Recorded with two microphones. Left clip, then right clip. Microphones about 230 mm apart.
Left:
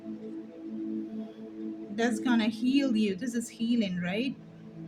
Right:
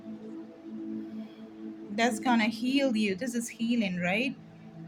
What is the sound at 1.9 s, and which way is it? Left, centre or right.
A woman's voice, centre.